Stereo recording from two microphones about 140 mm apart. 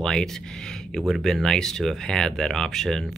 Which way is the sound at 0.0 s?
5° left (ahead or behind).